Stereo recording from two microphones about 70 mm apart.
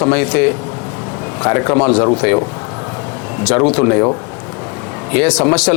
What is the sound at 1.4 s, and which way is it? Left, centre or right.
Speech, left.